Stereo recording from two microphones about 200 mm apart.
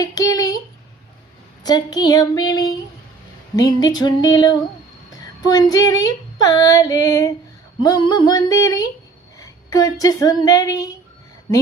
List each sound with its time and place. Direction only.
0.1 s a child's voice: 20° left (ahead or behind)
1.6 s female singing: 20° left (ahead or behind)
5.5 s speech: 20° left (ahead or behind)
7.8 s female singing: 20° left (ahead or behind)
9.4 s speech: 20° left (ahead or behind)